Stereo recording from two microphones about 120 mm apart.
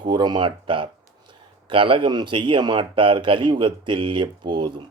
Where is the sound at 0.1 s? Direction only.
40° right (ahead or behind).